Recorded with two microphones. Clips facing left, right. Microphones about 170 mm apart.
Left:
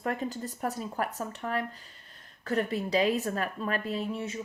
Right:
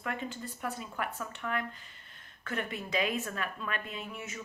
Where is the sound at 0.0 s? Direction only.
35° left (ahead or behind).